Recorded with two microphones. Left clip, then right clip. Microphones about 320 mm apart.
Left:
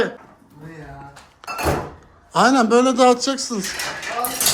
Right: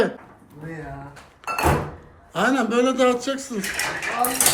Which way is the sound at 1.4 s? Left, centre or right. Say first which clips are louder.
Right 2 dB; centre.